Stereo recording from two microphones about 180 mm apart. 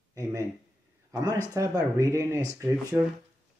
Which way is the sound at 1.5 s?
20° right (ahead or behind).